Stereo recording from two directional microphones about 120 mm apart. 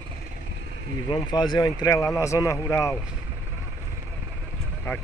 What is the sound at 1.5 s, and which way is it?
Speech, 30° left (ahead or behind).